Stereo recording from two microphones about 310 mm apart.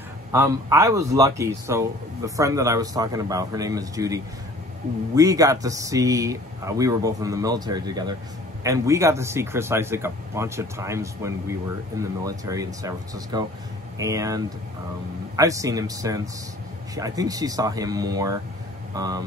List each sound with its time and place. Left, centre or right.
0.3 s speech: centre